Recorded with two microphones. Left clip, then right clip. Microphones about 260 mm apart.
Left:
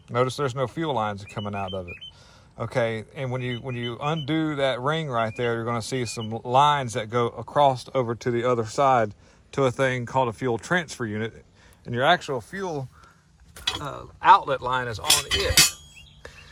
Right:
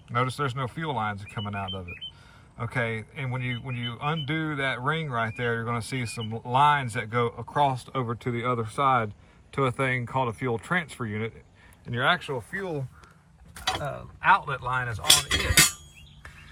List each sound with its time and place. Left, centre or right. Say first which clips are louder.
0.2 s a man's voice: left 4 dB; centre
15.0 s speech: right 2 dB; centre